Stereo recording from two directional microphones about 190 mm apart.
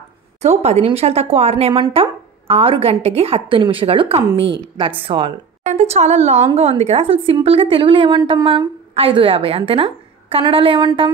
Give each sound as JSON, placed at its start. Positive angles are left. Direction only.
{"t": 0.4, "sound": "a woman's voice", "side_deg": -35}
{"t": 5.6, "sound": "a woman's voice", "side_deg": -35}